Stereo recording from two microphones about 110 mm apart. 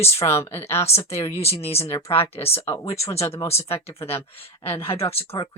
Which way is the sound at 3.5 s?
65° left (ahead or behind).